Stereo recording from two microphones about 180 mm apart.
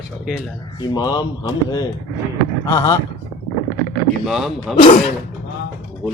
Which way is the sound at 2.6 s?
20° left (ahead or behind).